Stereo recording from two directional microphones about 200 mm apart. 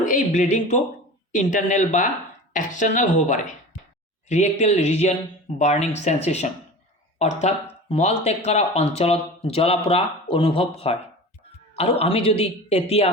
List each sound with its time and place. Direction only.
0.0 s speech: 40° left (ahead or behind)
11.8 s speech: 30° left (ahead or behind)